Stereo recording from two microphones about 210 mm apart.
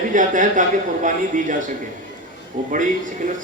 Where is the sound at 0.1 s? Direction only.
40° right (ahead or behind).